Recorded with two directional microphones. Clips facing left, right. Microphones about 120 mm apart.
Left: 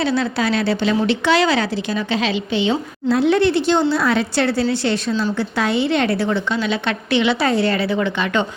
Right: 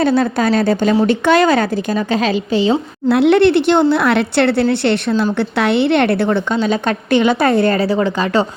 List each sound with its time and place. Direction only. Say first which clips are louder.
0.0 s a woman's voice: right 5 dB; 45° right (ahead or behind)
3.1 s speech: right 5 dB; 65° right (ahead or behind)
6.6 s a woman's voice: right 5 dB; 45° right (ahead or behind)